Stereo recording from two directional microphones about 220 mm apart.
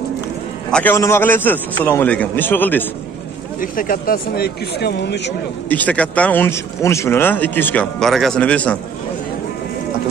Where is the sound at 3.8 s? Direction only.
40° left (ahead or behind).